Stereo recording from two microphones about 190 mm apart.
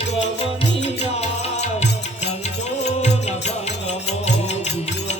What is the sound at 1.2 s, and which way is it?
Music, 35° left (ahead or behind).